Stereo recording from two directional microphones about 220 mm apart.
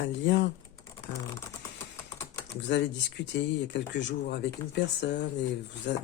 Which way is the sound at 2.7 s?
50° left (ahead or behind).